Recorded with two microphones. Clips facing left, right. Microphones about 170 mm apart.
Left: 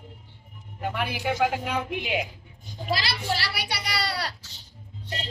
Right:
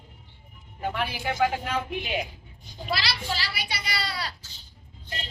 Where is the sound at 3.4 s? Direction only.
70° left (ahead or behind).